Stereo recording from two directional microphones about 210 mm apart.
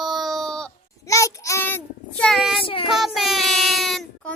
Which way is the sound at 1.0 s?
15° left (ahead or behind).